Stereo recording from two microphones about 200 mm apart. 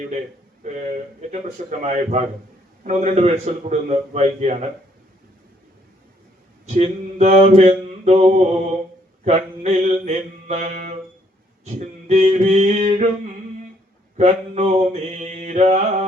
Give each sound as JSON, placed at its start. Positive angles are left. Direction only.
{"t": 0.6, "sound": "a man's voice", "side_deg": -35}
{"t": 6.7, "sound": "a man's voice", "side_deg": -35}
{"t": 14.2, "sound": "a man's voice", "side_deg": -35}